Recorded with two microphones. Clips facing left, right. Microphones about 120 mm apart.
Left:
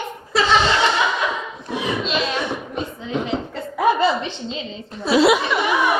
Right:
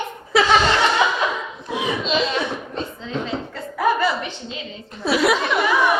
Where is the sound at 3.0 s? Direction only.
15° left (ahead or behind).